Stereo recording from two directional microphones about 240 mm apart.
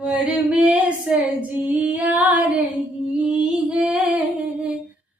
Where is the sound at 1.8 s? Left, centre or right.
Centre.